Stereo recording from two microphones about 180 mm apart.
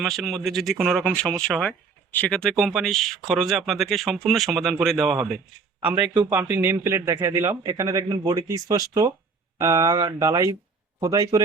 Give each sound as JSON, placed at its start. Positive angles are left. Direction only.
{"t": 0.0, "sound": "a man's voice", "side_deg": 0}